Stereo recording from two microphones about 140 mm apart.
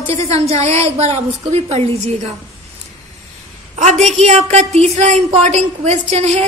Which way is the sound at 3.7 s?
55° right (ahead or behind).